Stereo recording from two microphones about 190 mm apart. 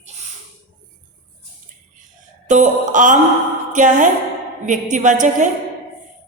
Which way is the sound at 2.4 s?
40° right (ahead or behind).